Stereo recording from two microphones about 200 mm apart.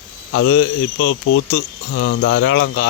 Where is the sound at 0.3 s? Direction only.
75° left (ahead or behind).